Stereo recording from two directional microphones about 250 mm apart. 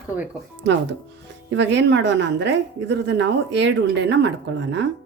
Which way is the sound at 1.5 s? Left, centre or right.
Right.